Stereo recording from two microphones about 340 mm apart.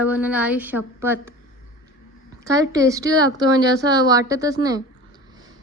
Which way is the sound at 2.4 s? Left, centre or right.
Centre.